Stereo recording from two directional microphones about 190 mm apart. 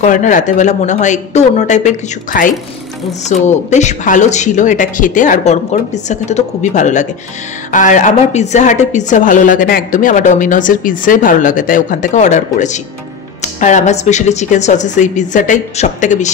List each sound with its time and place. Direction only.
0.0 s a woman's voice: 40° left (ahead or behind)